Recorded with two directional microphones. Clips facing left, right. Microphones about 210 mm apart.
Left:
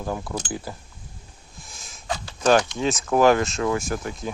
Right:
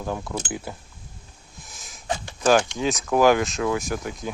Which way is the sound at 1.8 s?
20° right (ahead or behind).